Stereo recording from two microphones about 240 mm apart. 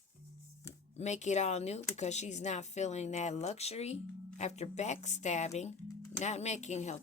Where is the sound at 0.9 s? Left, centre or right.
Left.